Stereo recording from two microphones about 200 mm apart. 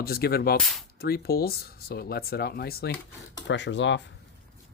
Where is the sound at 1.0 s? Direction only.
50° left (ahead or behind).